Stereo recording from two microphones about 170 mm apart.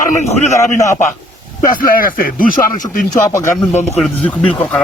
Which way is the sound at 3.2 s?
20° left (ahead or behind).